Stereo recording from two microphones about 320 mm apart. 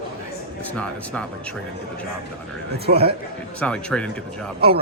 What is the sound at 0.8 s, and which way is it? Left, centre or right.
Speech, centre.